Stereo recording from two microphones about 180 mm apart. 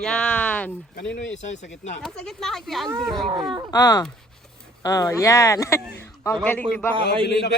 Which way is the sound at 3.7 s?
20° left (ahead or behind).